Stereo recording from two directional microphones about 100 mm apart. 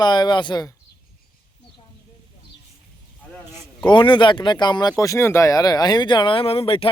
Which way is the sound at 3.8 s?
55° left (ahead or behind).